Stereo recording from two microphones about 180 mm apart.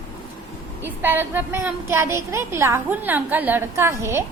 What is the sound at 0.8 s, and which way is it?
A woman's voice, 10° right (ahead or behind).